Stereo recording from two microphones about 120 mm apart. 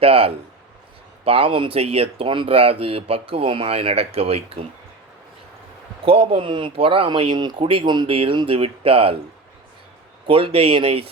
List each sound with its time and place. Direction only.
0.0 s speech: 50° right (ahead or behind)
6.1 s speech: 50° right (ahead or behind)
10.2 s speech: 50° right (ahead or behind)